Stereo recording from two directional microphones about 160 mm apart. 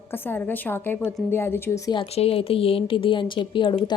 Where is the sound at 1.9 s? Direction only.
35° left (ahead or behind).